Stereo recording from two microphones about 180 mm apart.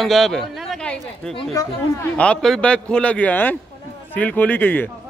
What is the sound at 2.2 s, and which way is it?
Speech, 5° left (ahead or behind).